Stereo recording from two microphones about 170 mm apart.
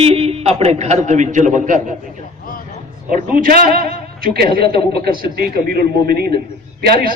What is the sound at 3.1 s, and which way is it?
A man's voice, 55° right (ahead or behind).